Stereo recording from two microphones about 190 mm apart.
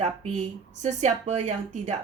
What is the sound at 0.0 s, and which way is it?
Speech, 35° right (ahead or behind).